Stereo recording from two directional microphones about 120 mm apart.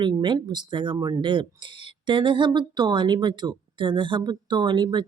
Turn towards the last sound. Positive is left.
turn(degrees=-40)  # may be behind; listen again after turning